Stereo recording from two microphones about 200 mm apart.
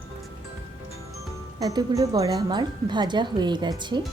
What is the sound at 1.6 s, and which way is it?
Speech, 20° right (ahead or behind).